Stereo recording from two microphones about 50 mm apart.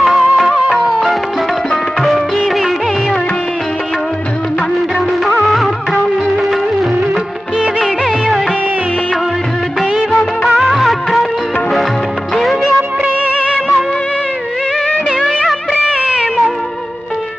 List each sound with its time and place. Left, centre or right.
0.0 s music: centre
5.4 s music of bollywood: centre
7.6 s music of bollywood: centre
10.1 s music of bollywood: centre
10.6 s music of bollywood: centre
12.3 s music: centre
13.3 s music: centre
16.0 s music: centre